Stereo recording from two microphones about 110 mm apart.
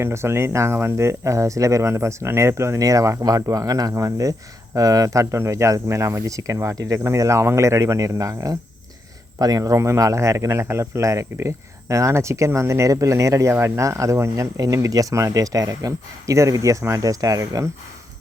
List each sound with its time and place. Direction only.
0.0 s speech: 25° right (ahead or behind)